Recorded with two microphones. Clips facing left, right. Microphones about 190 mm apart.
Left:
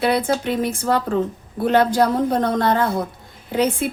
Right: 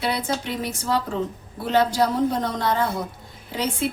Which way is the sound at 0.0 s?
55° left (ahead or behind).